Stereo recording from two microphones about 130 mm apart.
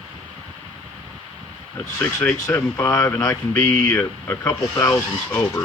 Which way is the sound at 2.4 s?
25° left (ahead or behind).